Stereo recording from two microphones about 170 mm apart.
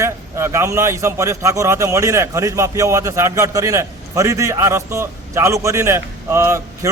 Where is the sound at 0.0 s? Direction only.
15° right (ahead or behind).